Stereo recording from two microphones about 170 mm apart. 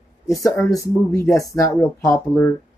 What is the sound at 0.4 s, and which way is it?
Speech, 20° left (ahead or behind).